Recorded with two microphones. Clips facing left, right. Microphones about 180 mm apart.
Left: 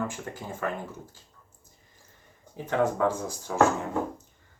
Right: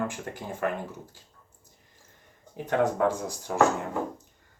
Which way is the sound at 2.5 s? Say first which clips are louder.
Right 1 dB; 15° right (ahead or behind).